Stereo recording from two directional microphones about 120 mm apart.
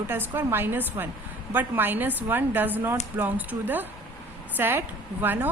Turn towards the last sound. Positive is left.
turn(degrees=-15)  # may be behind; listen again after turning